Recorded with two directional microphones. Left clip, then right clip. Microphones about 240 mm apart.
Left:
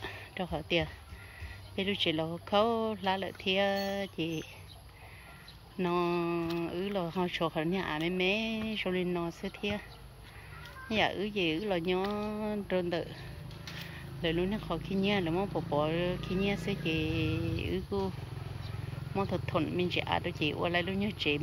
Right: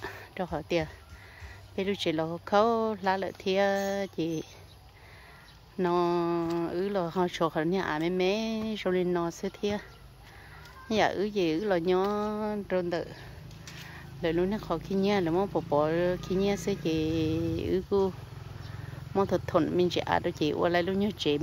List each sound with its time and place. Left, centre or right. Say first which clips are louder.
0.0 s a sound: right 3 dB; centre
1.8 s speech: right 2 dB; right
5.8 s speech: right 4 dB; right
10.9 s speech: right 4 dB; right
19.1 s speech: right 6 dB; right